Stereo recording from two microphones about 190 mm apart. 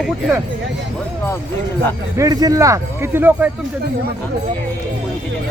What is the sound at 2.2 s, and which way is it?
Speech, 20° right (ahead or behind).